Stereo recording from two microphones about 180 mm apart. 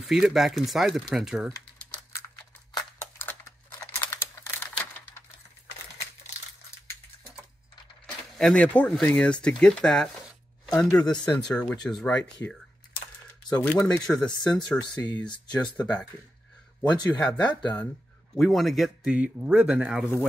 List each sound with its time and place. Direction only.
0.0 s speech: centre (ahead or behind)
1.5 s typing: 15° left (ahead or behind)
2.7 s a sound: 15° left (ahead or behind)
8.4 s speech: 5° left (ahead or behind)
13.5 s speech: 15° left (ahead or behind); by 20.1 s 5° right (ahead or behind)